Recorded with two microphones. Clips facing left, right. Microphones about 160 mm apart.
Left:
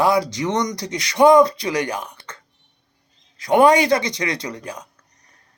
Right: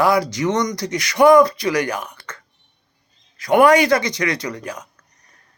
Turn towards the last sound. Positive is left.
turn(degrees=25)  # may be behind; listen again after turning